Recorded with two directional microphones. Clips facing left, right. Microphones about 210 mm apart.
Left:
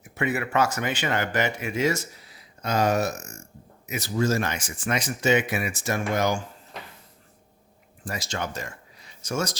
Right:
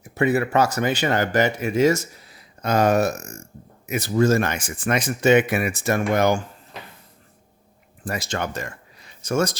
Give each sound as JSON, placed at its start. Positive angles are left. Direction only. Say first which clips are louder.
{"t": 0.0, "sound": "speech", "louder": "right 7 dB", "side_deg": -35}
{"t": 2.6, "sound": "speech", "louder": "right 5 dB", "side_deg": -55}
{"t": 8.0, "sound": "speech", "louder": "right 4 dB", "side_deg": -55}